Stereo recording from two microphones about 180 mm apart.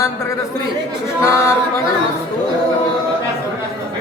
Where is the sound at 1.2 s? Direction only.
15° left (ahead or behind).